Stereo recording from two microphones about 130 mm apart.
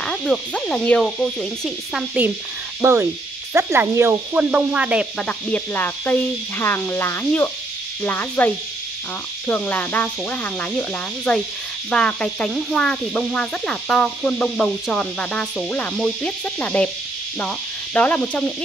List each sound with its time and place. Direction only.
0.0 s insect: 5° left (ahead or behind)
2.8 s speech: 20° right (ahead or behind)
5.2 s speech: 15° left (ahead or behind)
9.5 s speech: 15° left (ahead or behind)
17.4 s cricket: 10° left (ahead or behind)